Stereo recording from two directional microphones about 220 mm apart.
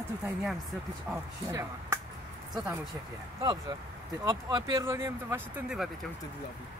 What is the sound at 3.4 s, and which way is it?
Speech, 20° right (ahead or behind).